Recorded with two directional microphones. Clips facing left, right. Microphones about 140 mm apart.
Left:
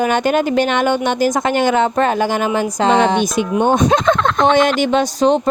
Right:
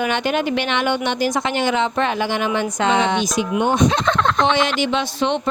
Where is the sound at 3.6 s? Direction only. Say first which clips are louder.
Left 4 dB; 45° left (ahead or behind).